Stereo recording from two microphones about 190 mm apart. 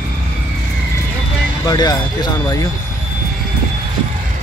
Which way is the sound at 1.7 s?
20° left (ahead or behind).